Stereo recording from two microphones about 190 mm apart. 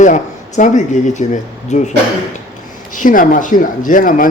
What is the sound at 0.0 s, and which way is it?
Speech, 40° left (ahead or behind).